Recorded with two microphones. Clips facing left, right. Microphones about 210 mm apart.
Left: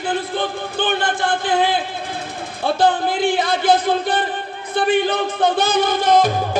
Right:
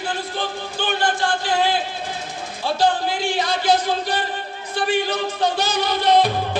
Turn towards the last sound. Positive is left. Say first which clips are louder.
# left 2 dB
turn(degrees=45)  # may be behind; listen again after turning